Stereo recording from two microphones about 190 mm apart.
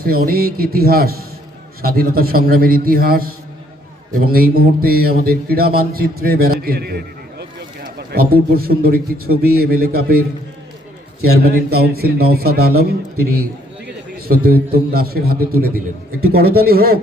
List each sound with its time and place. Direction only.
0.0 s a man's voice: 50° right (ahead or behind)
11.4 s a man's voice: 55° right (ahead or behind)